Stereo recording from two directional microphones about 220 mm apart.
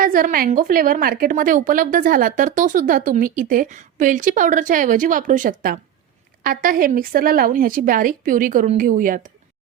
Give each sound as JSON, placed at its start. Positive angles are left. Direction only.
{"t": 0.0, "sound": "a woman's voice", "side_deg": -40}